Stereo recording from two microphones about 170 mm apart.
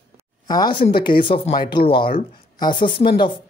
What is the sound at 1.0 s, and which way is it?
Speech, 30° left (ahead or behind).